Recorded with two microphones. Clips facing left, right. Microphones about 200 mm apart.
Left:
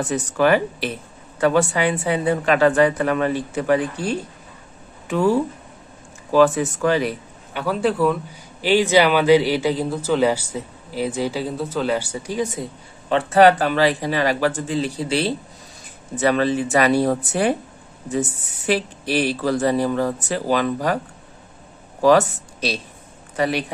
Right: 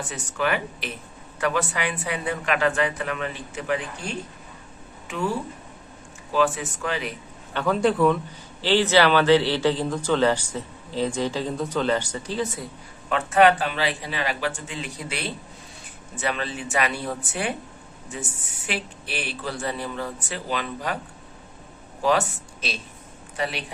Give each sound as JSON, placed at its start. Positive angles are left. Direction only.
{"t": 0.1, "sound": "speech", "side_deg": 40}
{"t": 6.3, "sound": "speech", "side_deg": 40}
{"t": 7.5, "sound": "a man's voice", "side_deg": 5}
{"t": 8.5, "sound": "a man's voice", "side_deg": 15}
{"t": 13.1, "sound": "speech", "side_deg": 35}
{"t": 22.0, "sound": "speech", "side_deg": 40}